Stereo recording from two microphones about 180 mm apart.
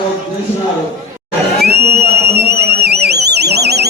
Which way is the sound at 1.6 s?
65° right (ahead or behind).